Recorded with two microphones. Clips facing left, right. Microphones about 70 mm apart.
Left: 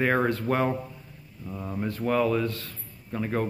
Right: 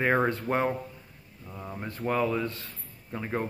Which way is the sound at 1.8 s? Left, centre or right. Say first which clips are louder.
Left 3 dB; right.